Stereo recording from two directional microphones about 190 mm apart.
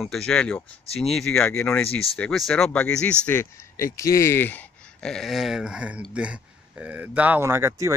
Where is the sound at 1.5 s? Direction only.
10° left (ahead or behind).